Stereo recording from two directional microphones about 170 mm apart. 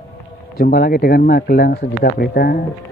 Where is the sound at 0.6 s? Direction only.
55° left (ahead or behind).